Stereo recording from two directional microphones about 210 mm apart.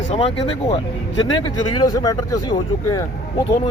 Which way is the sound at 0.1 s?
30° left (ahead or behind).